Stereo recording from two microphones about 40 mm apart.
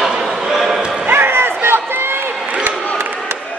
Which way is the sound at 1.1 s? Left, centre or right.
Right.